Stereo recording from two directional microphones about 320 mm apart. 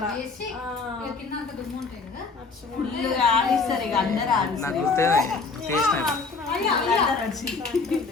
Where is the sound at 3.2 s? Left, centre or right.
Centre.